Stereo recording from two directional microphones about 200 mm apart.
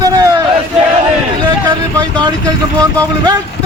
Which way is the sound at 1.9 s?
20° right (ahead or behind).